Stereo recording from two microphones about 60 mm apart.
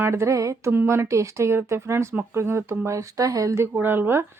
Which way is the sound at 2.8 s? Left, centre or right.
Right.